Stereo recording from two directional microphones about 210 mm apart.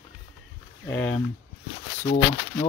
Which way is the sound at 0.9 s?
10° left (ahead or behind).